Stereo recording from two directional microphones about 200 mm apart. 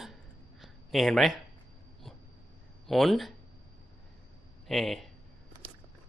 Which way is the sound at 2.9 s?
Centre (ahead or behind).